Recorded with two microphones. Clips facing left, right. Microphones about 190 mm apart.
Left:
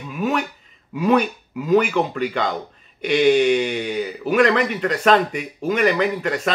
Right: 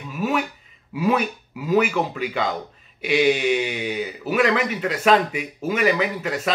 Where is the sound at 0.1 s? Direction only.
5° right (ahead or behind).